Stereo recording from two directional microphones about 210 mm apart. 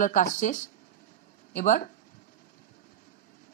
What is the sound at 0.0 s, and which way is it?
A woman's voice, 35° left (ahead or behind).